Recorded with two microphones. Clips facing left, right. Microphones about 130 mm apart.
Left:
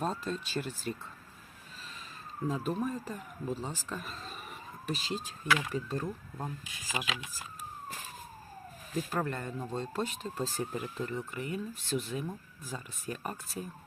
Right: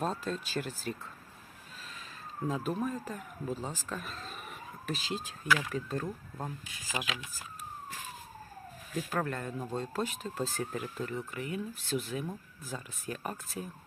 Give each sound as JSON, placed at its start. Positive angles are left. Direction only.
{"t": 0.0, "sound": "speech", "side_deg": 0}
{"t": 2.5, "sound": "speech", "side_deg": 0}
{"t": 9.0, "sound": "speech", "side_deg": 0}